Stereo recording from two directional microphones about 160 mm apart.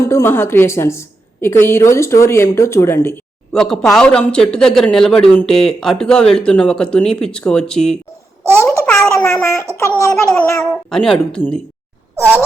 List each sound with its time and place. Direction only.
0.0 s a woman's voice: 20° left (ahead or behind)
3.5 s a man's voice: 5° left (ahead or behind)
8.5 s a child's voice: 15° left (ahead or behind)
10.6 s a man's voice: 5° left (ahead or behind)
12.1 s a sound: 15° right (ahead or behind)